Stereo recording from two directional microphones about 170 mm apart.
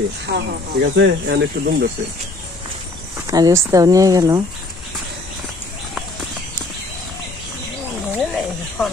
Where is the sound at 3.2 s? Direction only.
20° right (ahead or behind).